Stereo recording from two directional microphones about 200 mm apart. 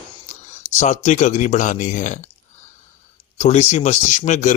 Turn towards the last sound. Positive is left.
turn(degrees=35)  # may be behind; listen again after turning